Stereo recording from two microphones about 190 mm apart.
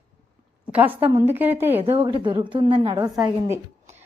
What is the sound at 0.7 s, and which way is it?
Speech, 10° right (ahead or behind).